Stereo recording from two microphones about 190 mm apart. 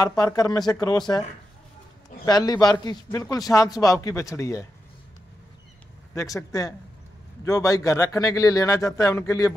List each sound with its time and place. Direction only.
0.0 s speech: 20° left (ahead or behind)
2.2 s a man's voice: 20° left (ahead or behind)
6.1 s a man's voice: 15° left (ahead or behind)